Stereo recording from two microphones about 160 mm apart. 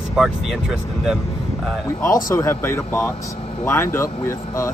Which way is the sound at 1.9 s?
20° left (ahead or behind).